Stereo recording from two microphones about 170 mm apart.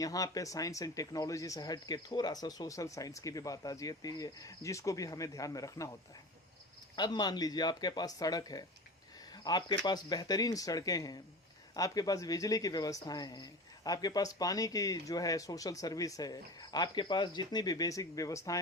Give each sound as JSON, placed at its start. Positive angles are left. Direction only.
{"t": 0.0, "sound": "speech", "side_deg": 20}
{"t": 6.9, "sound": "speech", "side_deg": 25}